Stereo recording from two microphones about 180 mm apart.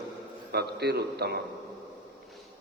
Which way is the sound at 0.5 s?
65° right (ahead or behind).